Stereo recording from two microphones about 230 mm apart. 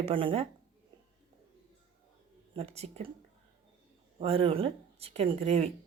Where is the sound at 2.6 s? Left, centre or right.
Right.